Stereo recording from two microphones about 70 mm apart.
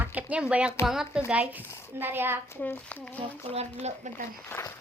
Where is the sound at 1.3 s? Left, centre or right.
Right.